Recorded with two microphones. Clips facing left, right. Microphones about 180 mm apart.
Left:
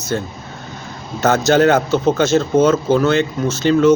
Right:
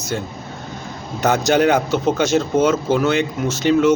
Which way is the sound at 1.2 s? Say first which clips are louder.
Left 3 dB; 15° right (ahead or behind).